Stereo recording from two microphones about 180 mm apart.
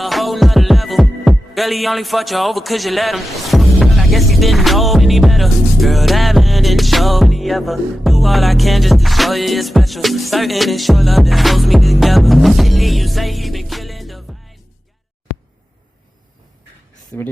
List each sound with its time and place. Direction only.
0.0 s music: centre (ahead or behind)
17.1 s speech: 10° left (ahead or behind)